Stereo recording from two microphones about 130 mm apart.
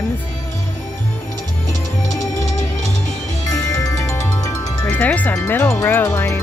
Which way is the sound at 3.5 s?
25° left (ahead or behind).